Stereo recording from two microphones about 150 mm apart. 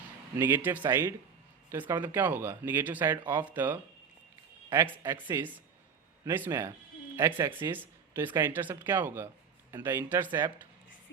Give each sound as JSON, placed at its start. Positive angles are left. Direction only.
{"t": 0.3, "sound": "speech", "side_deg": -15}
{"t": 5.0, "sound": "speech", "side_deg": -15}